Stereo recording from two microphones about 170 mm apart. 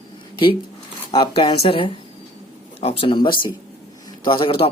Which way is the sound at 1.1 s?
30° left (ahead or behind).